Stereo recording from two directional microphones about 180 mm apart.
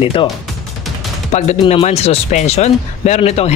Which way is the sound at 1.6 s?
35° left (ahead or behind).